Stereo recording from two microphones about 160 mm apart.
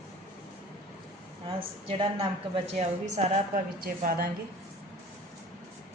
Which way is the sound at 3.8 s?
60° right (ahead or behind).